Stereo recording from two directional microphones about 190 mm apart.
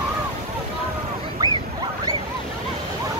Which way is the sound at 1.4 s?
15° right (ahead or behind).